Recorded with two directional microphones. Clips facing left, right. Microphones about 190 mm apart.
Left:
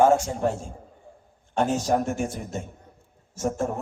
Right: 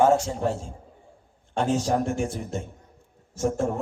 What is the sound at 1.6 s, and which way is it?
Speech, 45° left (ahead or behind).